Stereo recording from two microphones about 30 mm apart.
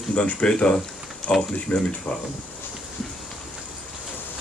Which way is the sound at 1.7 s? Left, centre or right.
Left.